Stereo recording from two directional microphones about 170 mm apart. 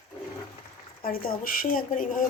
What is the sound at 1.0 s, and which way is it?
Speech, 60° left (ahead or behind).